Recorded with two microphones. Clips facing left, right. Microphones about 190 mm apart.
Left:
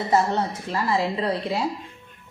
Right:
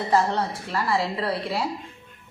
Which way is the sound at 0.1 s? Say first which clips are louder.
Left 1 dB; 20° left (ahead or behind).